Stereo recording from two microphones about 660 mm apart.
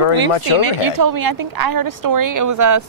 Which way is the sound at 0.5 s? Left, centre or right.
Right.